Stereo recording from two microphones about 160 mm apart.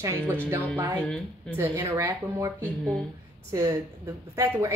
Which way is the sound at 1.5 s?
15° right (ahead or behind).